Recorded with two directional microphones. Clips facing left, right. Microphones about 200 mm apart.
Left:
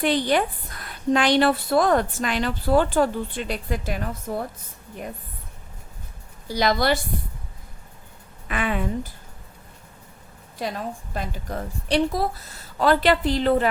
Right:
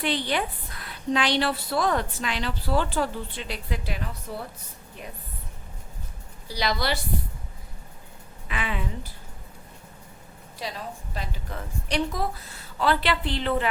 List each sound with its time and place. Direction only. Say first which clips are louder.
0.0 s a woman's voice: left 6 dB; 45° left (ahead or behind)
6.5 s a woman's voice: left 6 dB; 50° left (ahead or behind)
8.4 s a woman's voice: left 6 dB; 50° left (ahead or behind)
10.6 s a woman's voice: left 6 dB; 50° left (ahead or behind)